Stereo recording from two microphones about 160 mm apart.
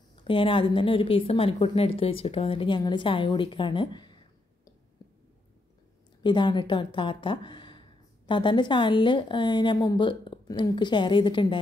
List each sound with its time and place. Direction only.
0.2 s a woman's voice: 30° left (ahead or behind)
6.2 s a woman's voice: 30° left (ahead or behind)